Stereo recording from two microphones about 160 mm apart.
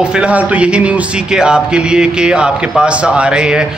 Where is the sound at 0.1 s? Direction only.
10° right (ahead or behind).